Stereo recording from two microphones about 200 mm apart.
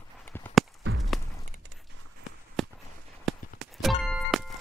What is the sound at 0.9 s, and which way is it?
Walk, 55° right (ahead or behind).